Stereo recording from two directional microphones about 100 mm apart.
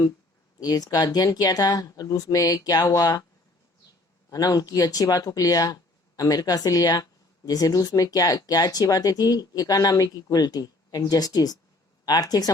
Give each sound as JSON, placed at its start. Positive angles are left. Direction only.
{"t": 0.6, "sound": "speech", "side_deg": 40}
{"t": 4.3, "sound": "speech", "side_deg": 35}